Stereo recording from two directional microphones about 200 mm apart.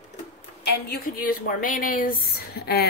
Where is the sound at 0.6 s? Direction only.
50° left (ahead or behind).